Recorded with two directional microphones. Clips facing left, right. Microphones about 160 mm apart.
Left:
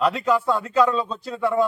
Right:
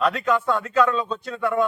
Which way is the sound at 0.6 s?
30° left (ahead or behind).